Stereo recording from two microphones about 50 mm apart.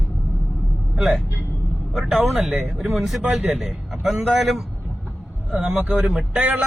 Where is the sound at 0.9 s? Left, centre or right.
Centre.